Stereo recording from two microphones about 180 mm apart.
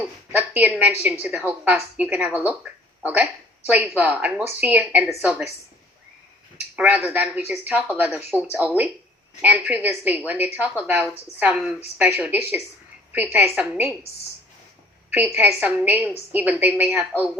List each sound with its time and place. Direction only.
0.3 s speech: 10° right (ahead or behind)
3.9 s speech: 10° right (ahead or behind)
6.7 s speech: 5° right (ahead or behind)
15.1 s speech: 10° right (ahead or behind)